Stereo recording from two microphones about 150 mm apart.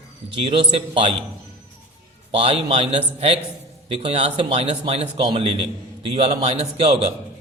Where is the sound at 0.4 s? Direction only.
40° right (ahead or behind).